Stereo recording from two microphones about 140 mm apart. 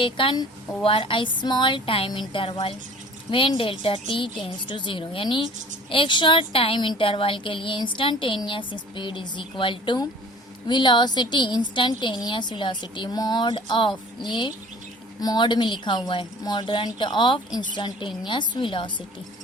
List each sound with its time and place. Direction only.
0.0 s speech: 35° left (ahead or behind)